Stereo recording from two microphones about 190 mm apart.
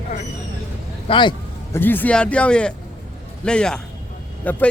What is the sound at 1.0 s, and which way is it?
Speech, 25° left (ahead or behind).